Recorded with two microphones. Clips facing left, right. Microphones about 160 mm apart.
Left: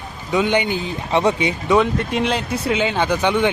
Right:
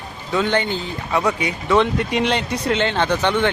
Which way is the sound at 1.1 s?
25° left (ahead or behind).